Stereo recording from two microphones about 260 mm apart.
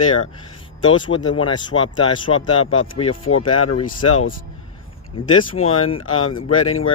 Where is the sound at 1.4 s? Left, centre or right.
Centre.